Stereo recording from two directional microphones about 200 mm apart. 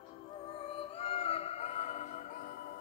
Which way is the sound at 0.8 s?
30° left (ahead or behind).